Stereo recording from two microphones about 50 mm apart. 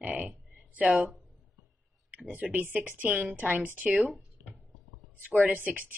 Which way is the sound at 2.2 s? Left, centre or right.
Right.